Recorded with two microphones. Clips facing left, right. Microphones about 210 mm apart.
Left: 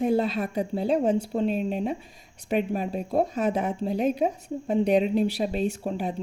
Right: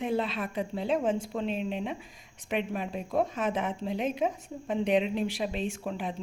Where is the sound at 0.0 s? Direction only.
40° left (ahead or behind).